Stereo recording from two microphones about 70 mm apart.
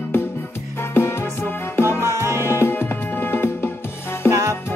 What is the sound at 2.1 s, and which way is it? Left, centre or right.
Music, right.